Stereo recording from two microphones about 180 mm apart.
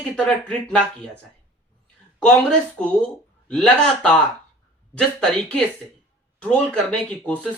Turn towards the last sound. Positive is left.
turn(degrees=5)  # may be behind; listen again after turning